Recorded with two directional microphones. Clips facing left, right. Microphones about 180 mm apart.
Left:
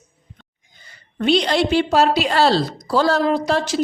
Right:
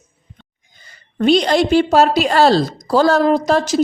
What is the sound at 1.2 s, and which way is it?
A woman's voice, 45° right (ahead or behind).